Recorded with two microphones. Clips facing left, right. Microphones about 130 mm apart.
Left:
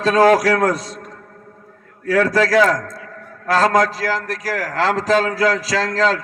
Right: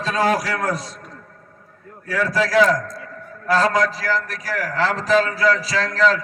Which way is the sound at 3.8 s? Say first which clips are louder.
Left 2 dB; 80° left.